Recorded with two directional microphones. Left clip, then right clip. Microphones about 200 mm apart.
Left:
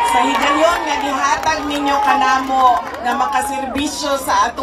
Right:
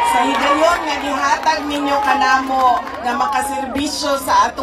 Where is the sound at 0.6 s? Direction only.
10° left (ahead or behind).